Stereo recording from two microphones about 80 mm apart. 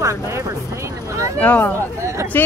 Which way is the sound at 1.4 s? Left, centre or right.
Left.